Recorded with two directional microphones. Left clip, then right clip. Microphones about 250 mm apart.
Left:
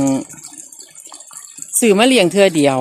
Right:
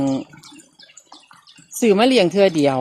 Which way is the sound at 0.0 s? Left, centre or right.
Centre.